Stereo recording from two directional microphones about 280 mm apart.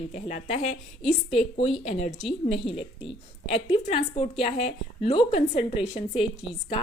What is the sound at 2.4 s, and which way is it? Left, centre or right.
A woman's voice, left.